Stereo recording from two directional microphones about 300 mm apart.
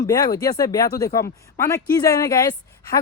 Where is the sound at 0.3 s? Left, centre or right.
Centre.